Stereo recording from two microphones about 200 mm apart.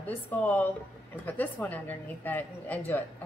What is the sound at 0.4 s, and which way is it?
A woman's voice, 10° left (ahead or behind).